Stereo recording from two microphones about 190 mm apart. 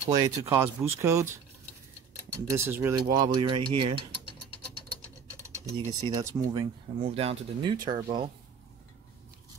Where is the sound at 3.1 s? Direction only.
25° right (ahead or behind).